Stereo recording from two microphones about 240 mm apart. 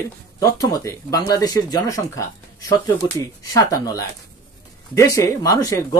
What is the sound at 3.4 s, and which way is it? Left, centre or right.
Speech, centre.